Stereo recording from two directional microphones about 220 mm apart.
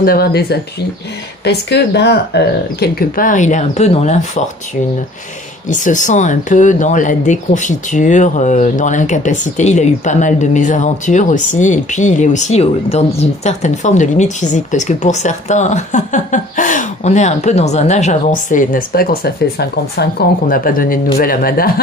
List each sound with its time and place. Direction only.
0.0 s speech: 45° left (ahead or behind)
5.7 s speech: 35° left (ahead or behind)